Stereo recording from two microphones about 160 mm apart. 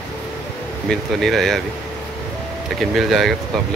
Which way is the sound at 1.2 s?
Centre (ahead or behind).